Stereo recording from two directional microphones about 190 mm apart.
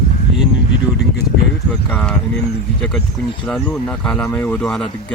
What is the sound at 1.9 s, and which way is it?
Speech, 5° left (ahead or behind).